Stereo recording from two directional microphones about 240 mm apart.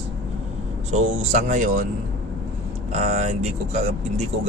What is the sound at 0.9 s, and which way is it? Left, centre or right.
Speech, right.